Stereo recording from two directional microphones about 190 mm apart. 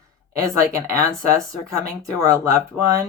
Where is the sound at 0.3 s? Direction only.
15° right (ahead or behind).